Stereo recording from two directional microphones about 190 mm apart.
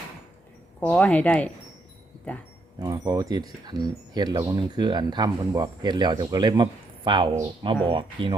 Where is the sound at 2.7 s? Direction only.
20° right (ahead or behind).